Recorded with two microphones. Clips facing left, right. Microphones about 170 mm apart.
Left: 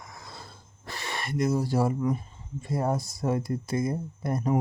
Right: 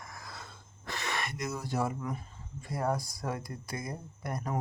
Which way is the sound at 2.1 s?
25° left (ahead or behind).